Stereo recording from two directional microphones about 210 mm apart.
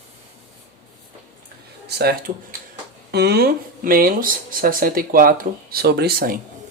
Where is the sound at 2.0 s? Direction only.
50° right (ahead or behind).